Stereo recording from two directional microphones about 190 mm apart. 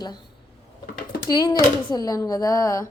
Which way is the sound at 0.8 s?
50° left (ahead or behind).